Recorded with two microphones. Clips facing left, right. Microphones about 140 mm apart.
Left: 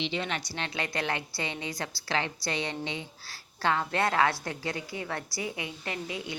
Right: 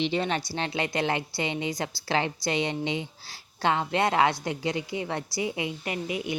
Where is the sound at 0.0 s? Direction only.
40° right (ahead or behind).